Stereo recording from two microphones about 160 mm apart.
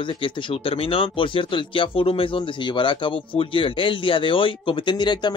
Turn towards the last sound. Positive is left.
turn(degrees=25)  # may be behind; listen again after turning